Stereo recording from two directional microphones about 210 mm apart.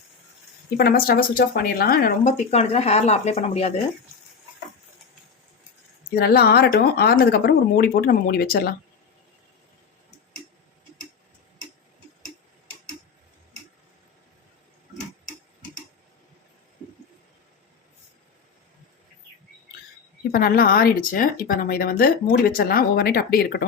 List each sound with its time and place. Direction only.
0.8 s speech: 45° left (ahead or behind); by 3.8 s 30° left (ahead or behind)
6.1 s speech: 50° left (ahead or behind)
20.3 s speech: 45° left (ahead or behind)